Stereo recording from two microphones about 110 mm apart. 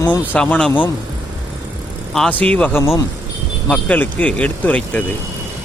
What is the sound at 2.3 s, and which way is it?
Speech, 10° left (ahead or behind).